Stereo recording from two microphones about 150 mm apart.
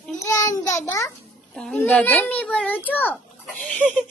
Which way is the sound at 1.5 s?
5° left (ahead or behind).